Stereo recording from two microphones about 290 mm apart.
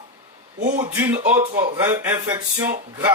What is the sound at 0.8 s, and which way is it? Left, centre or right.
Speech, centre.